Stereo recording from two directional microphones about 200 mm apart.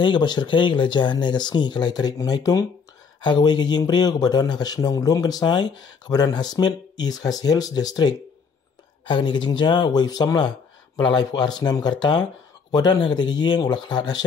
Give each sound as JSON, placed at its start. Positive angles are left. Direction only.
{"t": 0.0, "sound": "speech", "side_deg": 20}